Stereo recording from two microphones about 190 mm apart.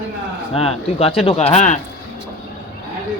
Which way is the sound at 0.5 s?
30° left (ahead or behind).